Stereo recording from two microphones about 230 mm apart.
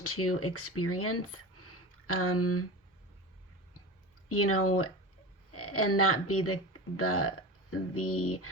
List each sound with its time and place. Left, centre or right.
0.0 s speech: left
4.3 s speech: left